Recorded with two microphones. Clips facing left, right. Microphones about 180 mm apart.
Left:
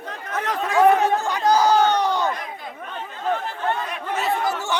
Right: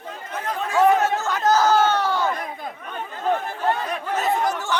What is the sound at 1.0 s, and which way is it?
Chatter, 15° left (ahead or behind).